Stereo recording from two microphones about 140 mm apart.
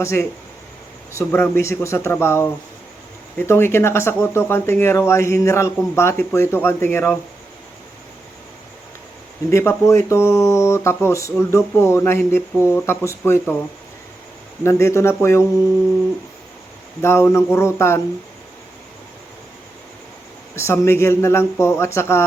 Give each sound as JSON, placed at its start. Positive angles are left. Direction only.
{"t": 0.0, "sound": "speech", "side_deg": 20}
{"t": 9.5, "sound": "speech", "side_deg": 20}
{"t": 14.6, "sound": "speech", "side_deg": 20}
{"t": 17.0, "sound": "speech", "side_deg": 20}
{"t": 20.6, "sound": "speech", "side_deg": 20}